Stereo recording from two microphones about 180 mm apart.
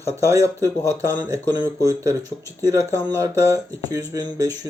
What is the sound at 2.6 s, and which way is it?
Speech, 20° right (ahead or behind).